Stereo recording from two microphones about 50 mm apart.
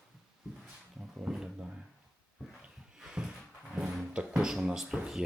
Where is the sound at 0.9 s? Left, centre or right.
Right.